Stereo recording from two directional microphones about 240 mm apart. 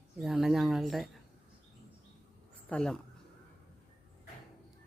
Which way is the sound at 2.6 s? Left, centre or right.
Centre.